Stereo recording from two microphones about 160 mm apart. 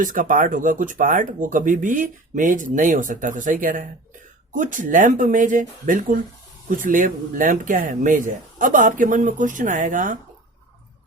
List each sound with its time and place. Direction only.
0.0 s speech: 55° right (ahead or behind)